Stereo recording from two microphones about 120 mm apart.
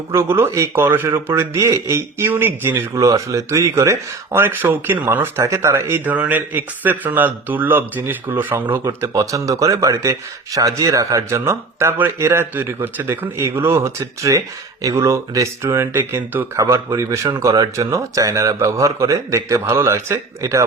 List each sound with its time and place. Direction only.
0.1 s a man's voice: 20° right (ahead or behind)